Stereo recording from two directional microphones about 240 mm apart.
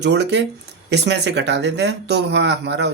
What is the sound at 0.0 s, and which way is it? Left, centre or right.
Speech, right.